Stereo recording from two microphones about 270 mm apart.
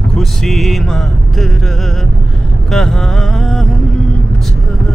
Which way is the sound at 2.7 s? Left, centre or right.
Centre.